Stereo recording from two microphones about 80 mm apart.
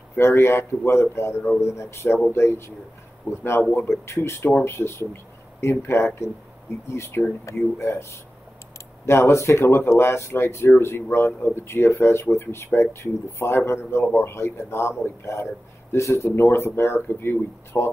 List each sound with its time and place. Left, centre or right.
0.2 s speech: left